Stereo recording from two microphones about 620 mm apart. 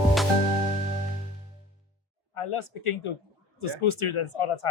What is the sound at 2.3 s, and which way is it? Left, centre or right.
Speech, left.